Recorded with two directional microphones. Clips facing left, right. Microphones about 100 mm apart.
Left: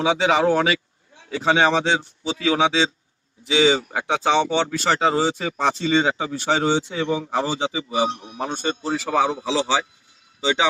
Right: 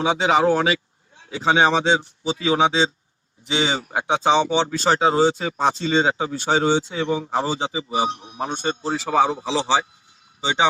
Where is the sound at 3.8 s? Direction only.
20° right (ahead or behind).